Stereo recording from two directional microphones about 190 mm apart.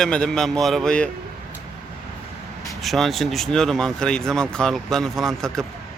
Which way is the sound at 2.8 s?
Centre (ahead or behind).